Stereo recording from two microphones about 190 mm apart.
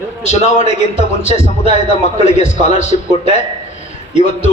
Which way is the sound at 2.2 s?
35° left (ahead or behind).